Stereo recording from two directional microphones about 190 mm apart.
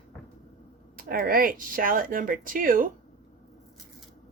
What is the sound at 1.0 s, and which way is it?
Speech, 50° right (ahead or behind).